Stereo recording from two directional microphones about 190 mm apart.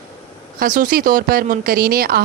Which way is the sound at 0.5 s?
45° right (ahead or behind).